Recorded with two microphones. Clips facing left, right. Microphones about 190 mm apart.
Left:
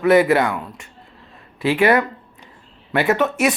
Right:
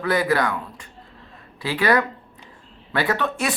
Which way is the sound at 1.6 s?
25° left (ahead or behind).